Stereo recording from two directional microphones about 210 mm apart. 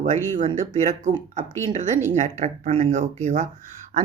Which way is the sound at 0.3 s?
35° right (ahead or behind).